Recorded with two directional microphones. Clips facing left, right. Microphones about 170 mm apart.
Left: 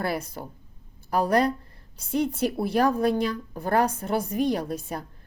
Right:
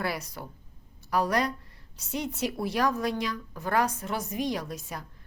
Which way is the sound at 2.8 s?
30° left (ahead or behind).